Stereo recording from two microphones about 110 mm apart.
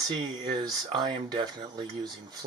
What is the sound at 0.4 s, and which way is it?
Speech, 40° right (ahead or behind).